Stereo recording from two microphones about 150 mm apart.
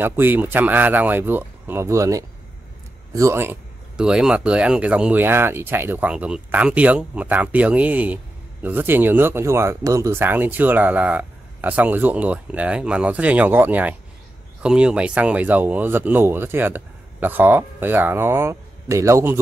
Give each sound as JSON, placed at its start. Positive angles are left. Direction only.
{"t": 0.0, "sound": "a man's voice", "side_deg": -15}
{"t": 3.9, "sound": "speech", "side_deg": -5}